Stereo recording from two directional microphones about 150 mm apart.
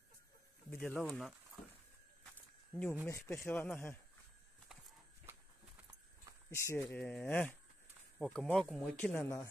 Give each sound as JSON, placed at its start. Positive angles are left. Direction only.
{"t": 0.7, "sound": "speech", "side_deg": 15}
{"t": 1.0, "sound": "speech", "side_deg": 0}
{"t": 2.7, "sound": "speech", "side_deg": 10}
{"t": 3.5, "sound": "speech", "side_deg": 5}
{"t": 6.5, "sound": "speech", "side_deg": 20}